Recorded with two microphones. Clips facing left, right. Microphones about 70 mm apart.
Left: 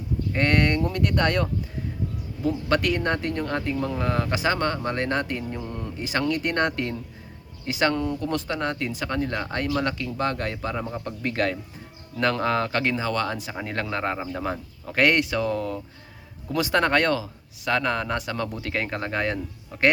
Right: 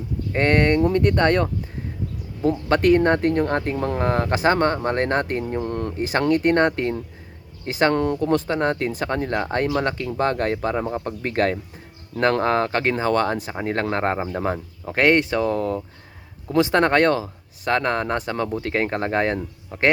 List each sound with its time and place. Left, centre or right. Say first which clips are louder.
0.3 s speech: right 5 dB; right
2.6 s speech: right 8 dB; right
5.6 s speech: right 7 dB; right
7.9 s speech: right 5 dB; right
8.2 s speech: right 6 dB; right
14.3 s speech: right 4 dB; right